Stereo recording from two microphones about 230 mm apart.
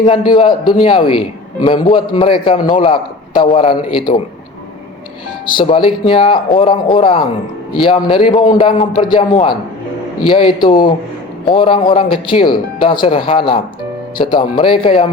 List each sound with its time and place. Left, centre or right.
0.0 s a man's voice: left
5.5 s a man's voice: left